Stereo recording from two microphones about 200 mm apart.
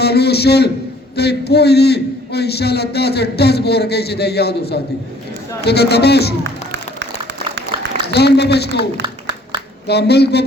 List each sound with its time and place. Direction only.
0.0 s a man's voice: 55° left (ahead or behind)
6.4 s a sound: 65° right (ahead or behind)
8.1 s a man's voice: 55° left (ahead or behind)